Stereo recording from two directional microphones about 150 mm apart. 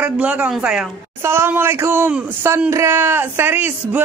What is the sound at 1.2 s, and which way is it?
Speech, 15° right (ahead or behind).